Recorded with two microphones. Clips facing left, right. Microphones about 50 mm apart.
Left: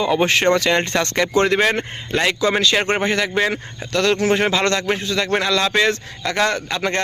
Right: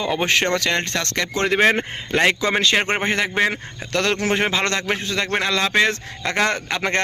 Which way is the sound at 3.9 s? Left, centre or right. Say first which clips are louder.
Left 3 dB; right.